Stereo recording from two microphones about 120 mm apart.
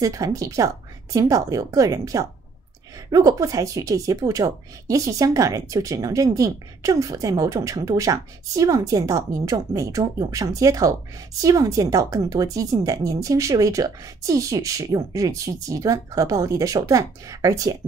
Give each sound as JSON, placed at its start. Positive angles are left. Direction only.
{"t": 0.0, "sound": "speech", "side_deg": -30}